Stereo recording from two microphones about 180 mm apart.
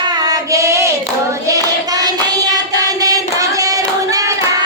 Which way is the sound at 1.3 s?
20° right (ahead or behind).